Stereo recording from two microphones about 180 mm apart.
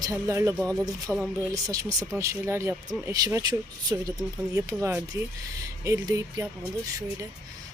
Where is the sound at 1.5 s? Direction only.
20° right (ahead or behind).